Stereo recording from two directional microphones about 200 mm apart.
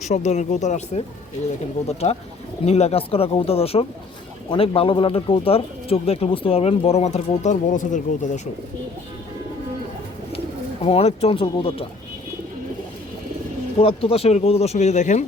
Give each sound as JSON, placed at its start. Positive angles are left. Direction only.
{"t": 0.0, "sound": "speech", "side_deg": 35}
{"t": 10.8, "sound": "speech", "side_deg": 30}
{"t": 13.7, "sound": "speech", "side_deg": 30}